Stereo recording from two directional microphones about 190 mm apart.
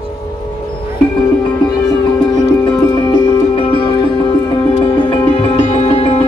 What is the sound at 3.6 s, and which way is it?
Music, 25° left (ahead or behind).